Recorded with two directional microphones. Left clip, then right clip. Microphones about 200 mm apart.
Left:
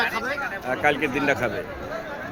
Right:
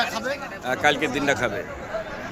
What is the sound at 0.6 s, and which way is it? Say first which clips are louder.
Speech: right 2 dB; centre (ahead or behind).